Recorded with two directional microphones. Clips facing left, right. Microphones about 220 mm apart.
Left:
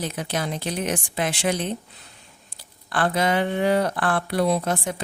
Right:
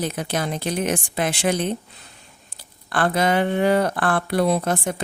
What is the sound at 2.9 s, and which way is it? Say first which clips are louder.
Speech: right 2 dB; 50° right (ahead or behind).